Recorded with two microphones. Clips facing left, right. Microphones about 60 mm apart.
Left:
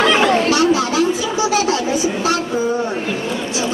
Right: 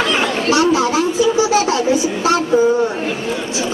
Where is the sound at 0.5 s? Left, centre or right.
Right.